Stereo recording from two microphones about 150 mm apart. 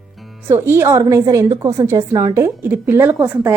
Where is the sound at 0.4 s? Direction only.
15° right (ahead or behind).